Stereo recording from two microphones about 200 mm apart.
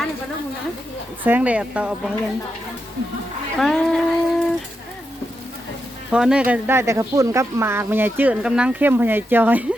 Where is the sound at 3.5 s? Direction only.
Centre (ahead or behind).